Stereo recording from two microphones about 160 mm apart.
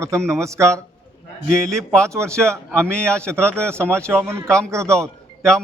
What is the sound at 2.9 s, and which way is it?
Speech, 5° left (ahead or behind).